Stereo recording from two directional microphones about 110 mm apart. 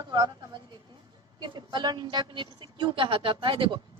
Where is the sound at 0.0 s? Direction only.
40° right (ahead or behind).